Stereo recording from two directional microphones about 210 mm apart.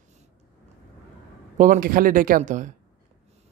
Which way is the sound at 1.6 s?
40° right (ahead or behind).